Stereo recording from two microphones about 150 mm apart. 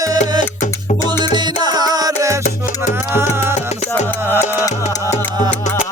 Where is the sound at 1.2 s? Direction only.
30° right (ahead or behind).